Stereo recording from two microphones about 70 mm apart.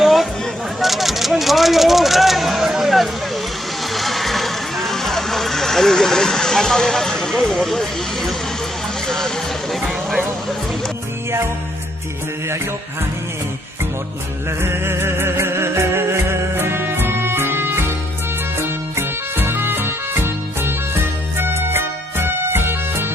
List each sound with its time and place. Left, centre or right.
0.0 s a sound: centre
0.8 s vehicle: centre
9.0 s music: centre
14.6 s music: right